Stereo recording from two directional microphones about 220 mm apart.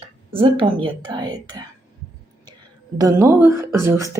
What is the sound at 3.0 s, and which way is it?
Speech, 15° right (ahead or behind).